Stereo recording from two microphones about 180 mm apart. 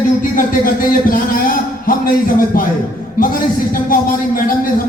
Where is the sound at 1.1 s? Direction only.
50° left (ahead or behind).